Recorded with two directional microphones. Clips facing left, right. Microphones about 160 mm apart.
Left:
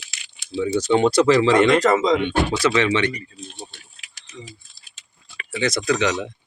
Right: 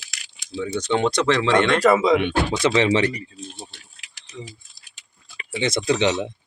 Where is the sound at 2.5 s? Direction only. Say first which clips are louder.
Right 3 dB; 25° right (ahead or behind).